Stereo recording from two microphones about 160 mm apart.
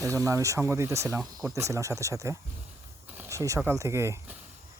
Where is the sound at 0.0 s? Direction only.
20° right (ahead or behind).